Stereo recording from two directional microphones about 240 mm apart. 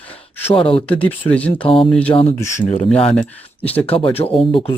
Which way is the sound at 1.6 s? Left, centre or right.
Left.